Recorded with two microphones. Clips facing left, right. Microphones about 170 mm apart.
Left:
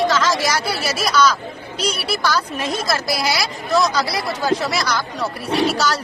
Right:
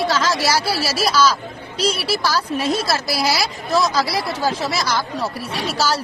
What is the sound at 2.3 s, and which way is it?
Speech, 30° right (ahead or behind).